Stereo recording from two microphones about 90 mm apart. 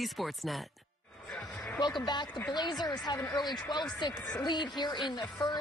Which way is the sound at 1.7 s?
50° left (ahead or behind).